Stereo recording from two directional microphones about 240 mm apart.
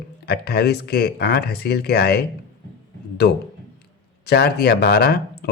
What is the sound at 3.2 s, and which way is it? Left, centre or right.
Speech, left.